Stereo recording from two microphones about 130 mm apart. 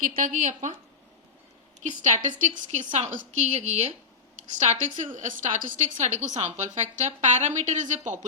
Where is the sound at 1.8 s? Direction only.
70° right (ahead or behind).